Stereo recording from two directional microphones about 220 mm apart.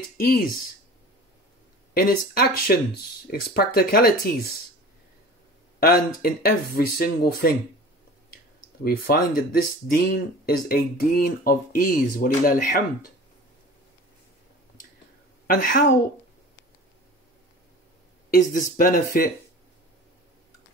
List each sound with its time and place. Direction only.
2.0 s speech: 40° left (ahead or behind)
5.8 s speech: 45° left (ahead or behind)
8.8 s speech: 45° left (ahead or behind)
15.4 s a woman's voice: 40° left (ahead or behind)
18.3 s speech: 40° left (ahead or behind)